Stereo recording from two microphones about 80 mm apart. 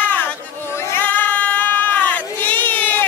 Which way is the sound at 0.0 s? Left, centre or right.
Left.